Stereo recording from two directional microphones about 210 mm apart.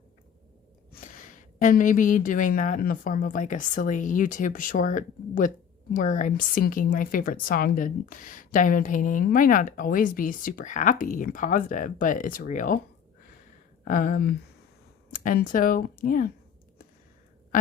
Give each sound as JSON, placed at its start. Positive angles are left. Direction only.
{"t": 0.9, "sound": "speech", "side_deg": 40}
{"t": 13.8, "sound": "speech", "side_deg": 40}